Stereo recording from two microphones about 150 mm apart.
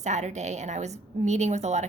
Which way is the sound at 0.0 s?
50° right (ahead or behind).